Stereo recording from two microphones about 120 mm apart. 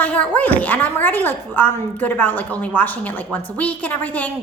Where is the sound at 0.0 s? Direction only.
10° left (ahead or behind).